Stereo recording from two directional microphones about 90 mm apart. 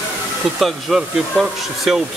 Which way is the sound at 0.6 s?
Centre (ahead or behind).